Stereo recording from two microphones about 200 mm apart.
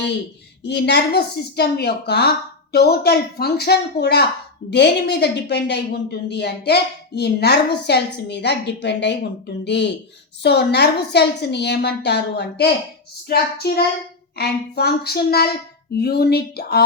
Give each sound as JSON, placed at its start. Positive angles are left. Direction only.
{"t": 0.6, "sound": "a woman's voice", "side_deg": 55}